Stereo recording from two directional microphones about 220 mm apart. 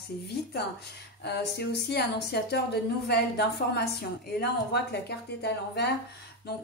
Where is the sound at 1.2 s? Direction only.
50° left (ahead or behind).